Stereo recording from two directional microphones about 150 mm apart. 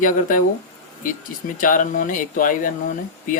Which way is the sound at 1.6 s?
60° left (ahead or behind).